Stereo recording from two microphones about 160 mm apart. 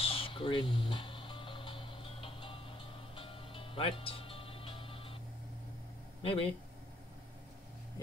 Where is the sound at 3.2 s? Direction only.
35° left (ahead or behind).